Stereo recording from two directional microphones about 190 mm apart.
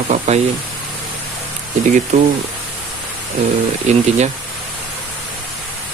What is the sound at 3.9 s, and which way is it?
Speech, 35° right (ahead or behind).